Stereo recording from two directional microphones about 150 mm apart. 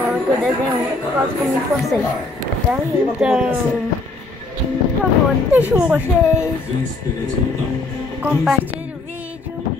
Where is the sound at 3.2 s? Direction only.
5° right (ahead or behind).